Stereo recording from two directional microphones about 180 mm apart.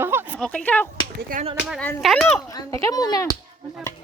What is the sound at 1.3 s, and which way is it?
Speech, 50° right (ahead or behind).